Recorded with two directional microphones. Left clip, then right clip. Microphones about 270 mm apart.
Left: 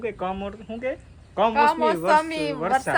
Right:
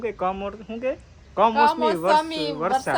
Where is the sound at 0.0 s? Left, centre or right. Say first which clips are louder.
Right 3 dB; centre.